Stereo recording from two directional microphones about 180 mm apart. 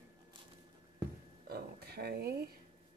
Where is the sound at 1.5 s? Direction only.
60° right (ahead or behind).